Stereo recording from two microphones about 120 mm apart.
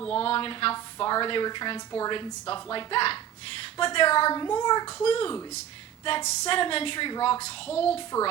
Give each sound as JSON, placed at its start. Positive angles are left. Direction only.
{"t": 0.1, "sound": "a woman's voice", "side_deg": 50}
{"t": 4.3, "sound": "a child's voice", "side_deg": 35}
{"t": 5.0, "sound": "a woman's voice", "side_deg": 50}
{"t": 6.2, "sound": "a sound", "side_deg": 65}
{"t": 6.6, "sound": "a woman's voice", "side_deg": 50}
{"t": 7.7, "sound": "a child's voice", "side_deg": 55}